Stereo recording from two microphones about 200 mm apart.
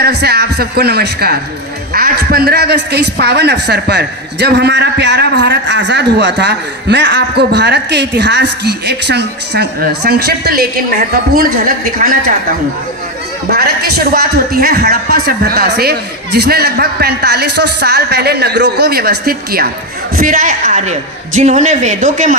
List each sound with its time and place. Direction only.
0.0 s a man's voice: 55° right (ahead or behind)
13.5 s a man's voice: 50° right (ahead or behind)